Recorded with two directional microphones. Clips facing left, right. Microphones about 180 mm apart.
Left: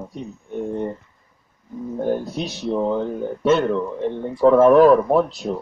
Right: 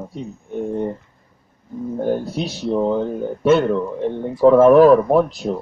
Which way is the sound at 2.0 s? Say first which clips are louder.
Right 1 dB; 10° right (ahead or behind).